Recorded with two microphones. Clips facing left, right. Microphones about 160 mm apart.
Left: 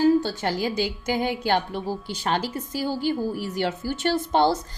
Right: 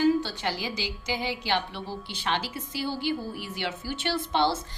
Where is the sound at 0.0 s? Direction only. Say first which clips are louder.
Left 4 dB; 45° left (ahead or behind).